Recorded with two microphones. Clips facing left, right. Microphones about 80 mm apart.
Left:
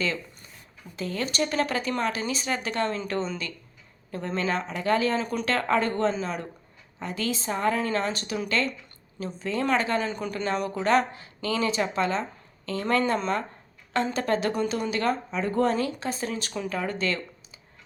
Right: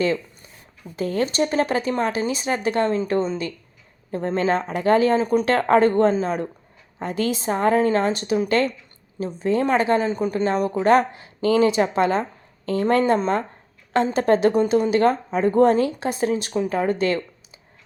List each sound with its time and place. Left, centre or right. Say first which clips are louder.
0.9 s a woman's voice: right 7 dB; right
16.0 s a woman's voice: right 8 dB; right
16.3 s speech: right 8 dB; right